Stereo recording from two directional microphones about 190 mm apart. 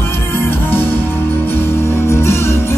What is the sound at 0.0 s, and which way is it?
Music, 10° left (ahead or behind).